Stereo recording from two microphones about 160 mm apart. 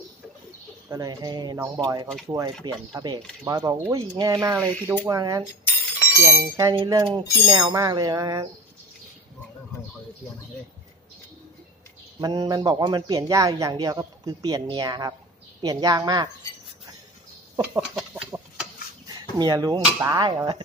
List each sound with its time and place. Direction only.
0.8 s a man's voice: 25° right (ahead or behind)
12.2 s a man's voice: 25° right (ahead or behind)
18.3 s chicken: 15° right (ahead or behind)
19.3 s a man's voice: 25° right (ahead or behind)